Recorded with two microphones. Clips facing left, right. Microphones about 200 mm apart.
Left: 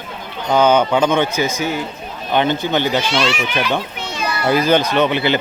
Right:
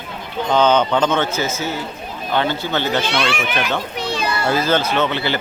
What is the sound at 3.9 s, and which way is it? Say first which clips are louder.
Children playing: right 3 dB; 35° right (ahead or behind).